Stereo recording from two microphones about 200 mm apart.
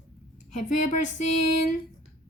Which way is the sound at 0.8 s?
40° left (ahead or behind).